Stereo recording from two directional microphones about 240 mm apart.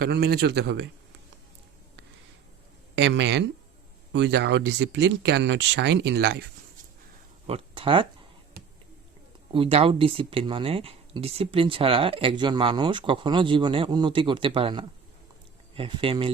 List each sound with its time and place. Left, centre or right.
0.0 s a man's voice: right
2.9 s speech: right
7.4 s speech: right
9.5 s speech: right